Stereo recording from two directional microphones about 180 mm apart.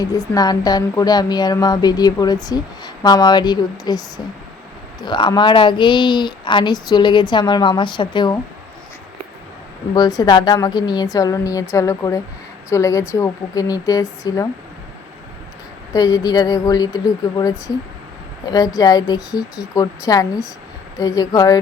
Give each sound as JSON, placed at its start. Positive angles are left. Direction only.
{"t": 0.0, "sound": "speech", "side_deg": 20}
{"t": 9.9, "sound": "a woman's voice", "side_deg": 20}
{"t": 15.9, "sound": "speech", "side_deg": 20}